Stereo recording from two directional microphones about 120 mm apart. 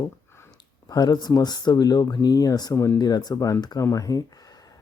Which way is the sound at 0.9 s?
35° left (ahead or behind).